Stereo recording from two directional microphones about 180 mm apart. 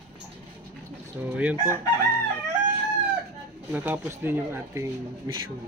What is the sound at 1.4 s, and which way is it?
Speech, 10° right (ahead or behind).